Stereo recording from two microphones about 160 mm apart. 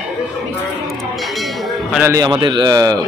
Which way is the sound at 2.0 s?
20° right (ahead or behind).